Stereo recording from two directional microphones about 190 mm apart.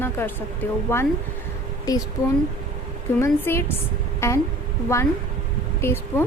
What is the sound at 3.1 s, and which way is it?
A woman's voice, 15° left (ahead or behind).